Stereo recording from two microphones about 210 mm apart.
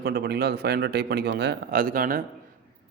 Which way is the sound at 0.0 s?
50° right (ahead or behind).